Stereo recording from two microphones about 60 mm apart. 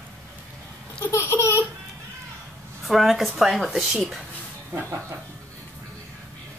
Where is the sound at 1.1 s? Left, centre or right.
Left.